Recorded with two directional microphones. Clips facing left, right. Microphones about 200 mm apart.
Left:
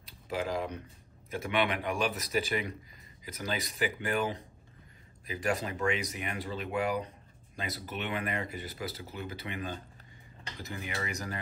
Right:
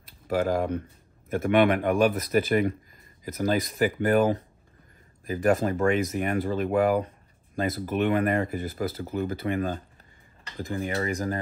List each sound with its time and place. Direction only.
0.0 s speech: 55° right (ahead or behind)